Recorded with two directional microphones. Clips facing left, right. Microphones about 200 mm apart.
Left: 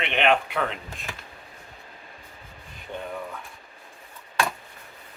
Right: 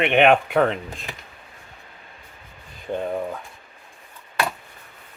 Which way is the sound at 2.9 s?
40° right (ahead or behind).